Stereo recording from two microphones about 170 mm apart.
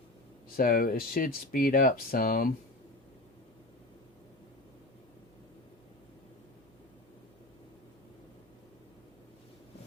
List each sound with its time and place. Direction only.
0.5 s speech: 55° left (ahead or behind)